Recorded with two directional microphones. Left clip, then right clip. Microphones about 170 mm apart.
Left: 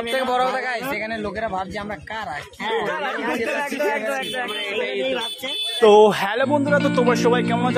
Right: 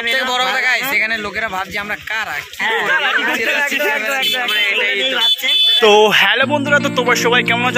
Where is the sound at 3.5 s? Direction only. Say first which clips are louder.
Right 7 dB; 30° right (ahead or behind).